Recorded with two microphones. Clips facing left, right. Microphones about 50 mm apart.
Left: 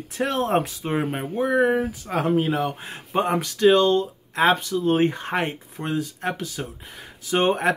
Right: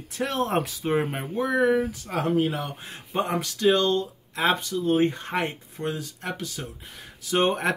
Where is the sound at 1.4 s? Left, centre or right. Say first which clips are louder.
Left 2 dB; left.